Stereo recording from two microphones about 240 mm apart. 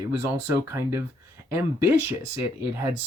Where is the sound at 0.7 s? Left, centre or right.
Centre.